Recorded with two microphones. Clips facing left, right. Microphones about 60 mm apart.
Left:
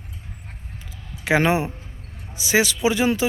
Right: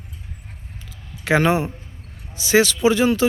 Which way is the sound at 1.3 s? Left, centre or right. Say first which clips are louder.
Right 1 dB; centre.